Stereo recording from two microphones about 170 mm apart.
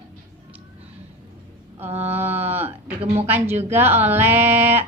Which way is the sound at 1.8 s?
40° right (ahead or behind).